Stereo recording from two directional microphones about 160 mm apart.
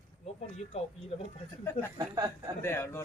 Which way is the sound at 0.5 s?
40° left (ahead or behind).